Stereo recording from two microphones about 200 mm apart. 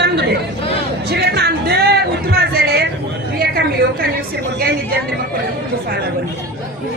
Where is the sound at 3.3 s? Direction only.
50° right (ahead or behind).